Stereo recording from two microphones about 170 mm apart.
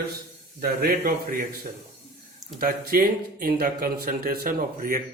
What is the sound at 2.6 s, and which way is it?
Speech, 60° right (ahead or behind).